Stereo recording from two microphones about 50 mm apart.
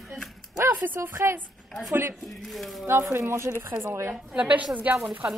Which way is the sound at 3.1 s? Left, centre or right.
Right.